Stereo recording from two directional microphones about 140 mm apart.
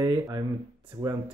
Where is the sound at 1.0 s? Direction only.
30° right (ahead or behind).